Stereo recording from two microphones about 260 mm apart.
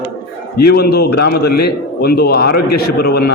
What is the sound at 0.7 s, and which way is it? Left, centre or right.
Speech, left.